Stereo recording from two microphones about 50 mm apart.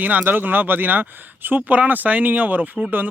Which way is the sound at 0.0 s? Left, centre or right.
Right.